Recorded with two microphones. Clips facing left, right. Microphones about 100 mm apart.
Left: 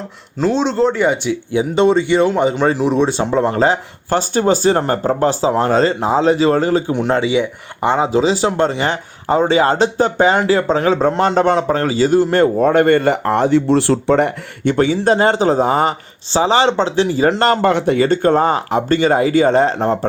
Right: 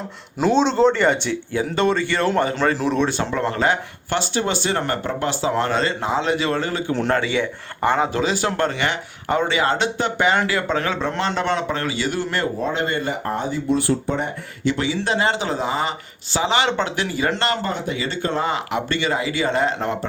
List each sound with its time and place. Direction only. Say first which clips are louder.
0.3 s speech: left 1 dB; centre (ahead or behind)
1.5 s speech: left 7 dB; 20° left (ahead or behind)
7.1 s speech: left 7 dB; 20° left (ahead or behind); by 12.2 s 35° left (ahead or behind)
12.3 s speech: left 11 dB; 50° left (ahead or behind); by 14.3 s 85° left
14.6 s speech: left 8 dB; 50° left (ahead or behind)
16.3 s speech: left 6 dB; 35° left (ahead or behind)
17.6 s speech: left 11 dB; 65° left (ahead or behind); by 20.1 s 35° left (ahead or behind)